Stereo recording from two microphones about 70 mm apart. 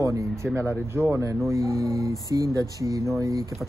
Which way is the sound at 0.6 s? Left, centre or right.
Right.